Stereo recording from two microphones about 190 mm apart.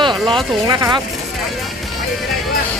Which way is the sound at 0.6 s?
25° right (ahead or behind).